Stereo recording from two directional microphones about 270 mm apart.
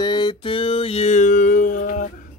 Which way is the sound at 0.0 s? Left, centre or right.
Centre.